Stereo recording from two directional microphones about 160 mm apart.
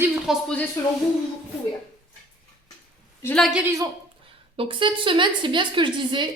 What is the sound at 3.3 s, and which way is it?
Speech, centre (ahead or behind).